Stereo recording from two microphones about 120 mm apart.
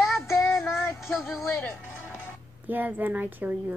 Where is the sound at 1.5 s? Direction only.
20° left (ahead or behind).